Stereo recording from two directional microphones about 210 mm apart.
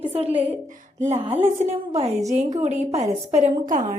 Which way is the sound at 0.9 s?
35° right (ahead or behind).